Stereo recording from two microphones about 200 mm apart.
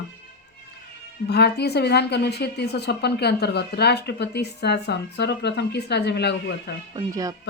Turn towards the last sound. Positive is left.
turn(degrees=-15)  # may be behind; listen again after turning